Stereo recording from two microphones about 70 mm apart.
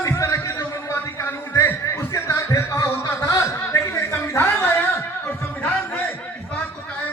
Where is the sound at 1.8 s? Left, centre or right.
Left.